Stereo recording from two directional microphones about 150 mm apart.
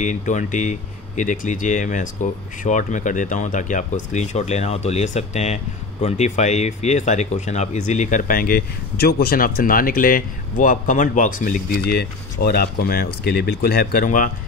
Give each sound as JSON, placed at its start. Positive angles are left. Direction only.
{"t": 0.0, "sound": "speech", "side_deg": 55}